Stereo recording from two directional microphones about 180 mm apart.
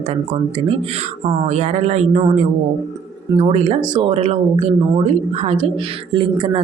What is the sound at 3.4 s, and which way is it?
Speech, 35° right (ahead or behind).